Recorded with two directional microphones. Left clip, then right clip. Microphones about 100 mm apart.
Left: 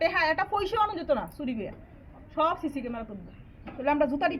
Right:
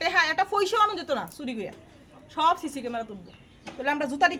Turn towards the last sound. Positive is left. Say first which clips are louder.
# even
turn(degrees=-25)  # may be behind; listen again after turning